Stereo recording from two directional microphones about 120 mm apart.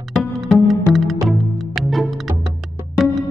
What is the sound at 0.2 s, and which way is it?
Music, centre (ahead or behind).